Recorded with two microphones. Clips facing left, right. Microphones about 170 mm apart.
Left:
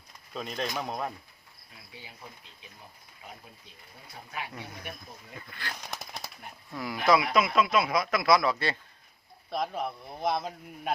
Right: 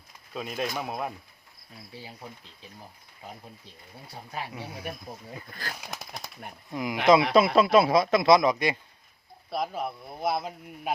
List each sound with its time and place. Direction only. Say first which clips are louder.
0.3 s speech: right 2 dB; 5° right (ahead or behind)
1.9 s speech: right 5 dB; 35° right (ahead or behind)
4.0 s speech: right 3 dB; 35° right (ahead or behind)
4.5 s speech: right 4 dB; 10° right (ahead or behind)
5.5 s speech: even; 40° right (ahead or behind)
5.7 s speech: right 1 dB; 5° right (ahead or behind)
6.7 s speech: right 4 dB; 20° right (ahead or behind)
7.3 s speech: right 6 dB; 30° right (ahead or behind); by 8.8 s 15° right (ahead or behind)
9.5 s speech: right 1 dB; 5° right (ahead or behind)